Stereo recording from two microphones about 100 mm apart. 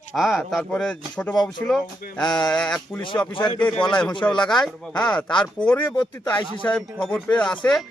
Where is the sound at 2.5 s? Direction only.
10° left (ahead or behind).